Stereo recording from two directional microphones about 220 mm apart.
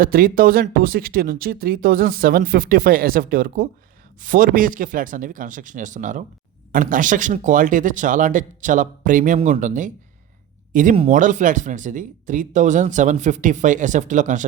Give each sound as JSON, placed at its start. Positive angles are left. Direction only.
{"t": 0.0, "sound": "speech", "side_deg": -40}